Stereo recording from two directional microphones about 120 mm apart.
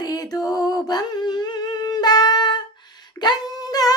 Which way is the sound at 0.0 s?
30° left (ahead or behind).